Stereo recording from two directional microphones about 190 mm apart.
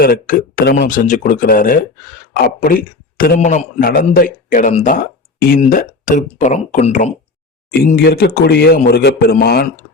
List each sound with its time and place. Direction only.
0.0 s a man's voice: 50° left (ahead or behind)
7.7 s speech: 55° left (ahead or behind)